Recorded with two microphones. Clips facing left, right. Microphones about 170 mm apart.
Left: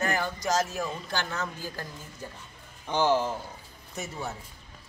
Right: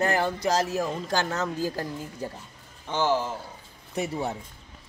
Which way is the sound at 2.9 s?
15° left (ahead or behind).